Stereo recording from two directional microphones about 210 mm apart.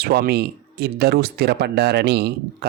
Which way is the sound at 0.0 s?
50° right (ahead or behind).